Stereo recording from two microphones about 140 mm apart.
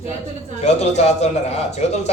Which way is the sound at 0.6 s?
50° left (ahead or behind).